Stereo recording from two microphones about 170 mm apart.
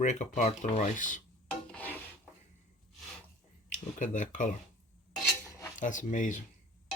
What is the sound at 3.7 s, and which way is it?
Speech, 50° left (ahead or behind).